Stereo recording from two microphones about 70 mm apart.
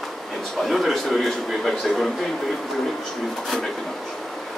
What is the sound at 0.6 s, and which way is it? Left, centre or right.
A man's voice, centre.